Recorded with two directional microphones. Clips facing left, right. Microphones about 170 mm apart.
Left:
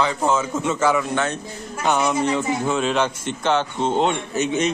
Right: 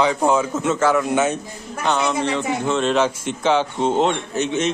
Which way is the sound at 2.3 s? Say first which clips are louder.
Even; 5° left (ahead or behind).